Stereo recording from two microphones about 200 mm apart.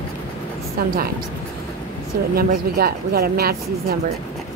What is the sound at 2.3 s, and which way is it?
A child's voice, 50° right (ahead or behind).